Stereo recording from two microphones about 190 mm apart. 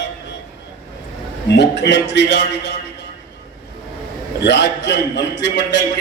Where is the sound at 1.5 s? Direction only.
70° left (ahead or behind).